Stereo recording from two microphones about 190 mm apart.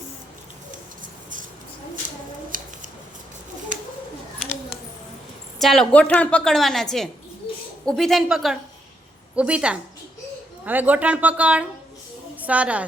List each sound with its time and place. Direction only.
2.5 s scissors: 45° right (ahead or behind)
5.5 s a woman's voice: centre (ahead or behind)